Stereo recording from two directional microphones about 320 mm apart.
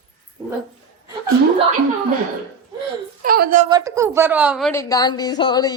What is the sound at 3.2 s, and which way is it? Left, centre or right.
Speech, right.